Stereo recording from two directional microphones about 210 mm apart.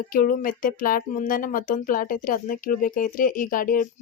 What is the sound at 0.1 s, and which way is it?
Speech, 40° left (ahead or behind).